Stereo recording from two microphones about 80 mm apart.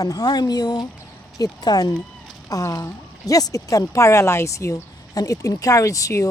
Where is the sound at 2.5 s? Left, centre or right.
Left.